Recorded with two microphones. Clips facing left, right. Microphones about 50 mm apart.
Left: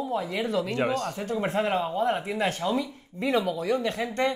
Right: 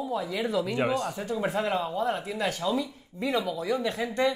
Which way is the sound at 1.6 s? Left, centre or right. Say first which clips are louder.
Left 4 dB; left.